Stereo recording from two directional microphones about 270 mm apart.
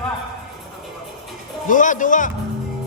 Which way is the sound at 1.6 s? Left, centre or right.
Left.